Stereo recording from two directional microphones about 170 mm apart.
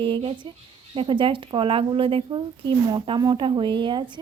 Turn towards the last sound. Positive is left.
turn(degrees=-30)  # may be behind; listen again after turning